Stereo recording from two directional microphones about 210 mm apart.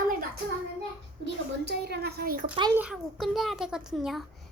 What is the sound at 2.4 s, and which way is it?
Speech, 25° right (ahead or behind).